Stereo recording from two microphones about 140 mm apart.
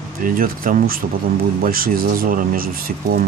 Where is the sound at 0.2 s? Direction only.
85° right.